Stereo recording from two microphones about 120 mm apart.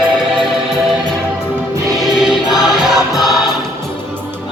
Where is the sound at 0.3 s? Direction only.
5° right (ahead or behind).